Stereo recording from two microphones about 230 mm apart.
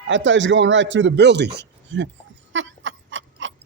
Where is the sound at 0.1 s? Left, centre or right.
Right.